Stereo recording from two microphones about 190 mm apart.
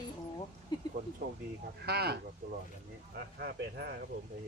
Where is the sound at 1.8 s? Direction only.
60° right (ahead or behind).